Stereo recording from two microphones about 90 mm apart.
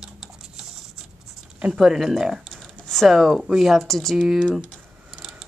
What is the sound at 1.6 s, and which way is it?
Speech, 5° right (ahead or behind).